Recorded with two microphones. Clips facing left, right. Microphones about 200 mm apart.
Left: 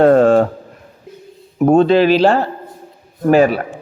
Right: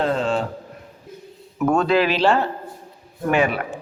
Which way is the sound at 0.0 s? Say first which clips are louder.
Left 12 dB; 55° left (ahead or behind).